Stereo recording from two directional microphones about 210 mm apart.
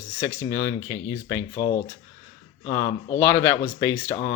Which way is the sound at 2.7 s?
15° left (ahead or behind).